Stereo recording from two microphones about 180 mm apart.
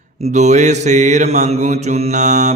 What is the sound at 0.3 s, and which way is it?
Mantra, 40° right (ahead or behind).